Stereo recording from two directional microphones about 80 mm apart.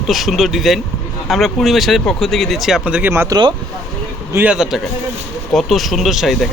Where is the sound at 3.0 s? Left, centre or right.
Right.